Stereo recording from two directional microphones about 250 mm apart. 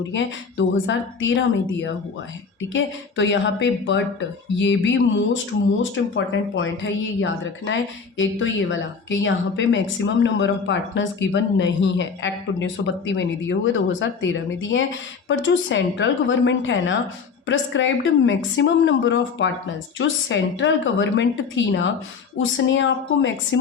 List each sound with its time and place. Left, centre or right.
0.9 s a woman's voice: left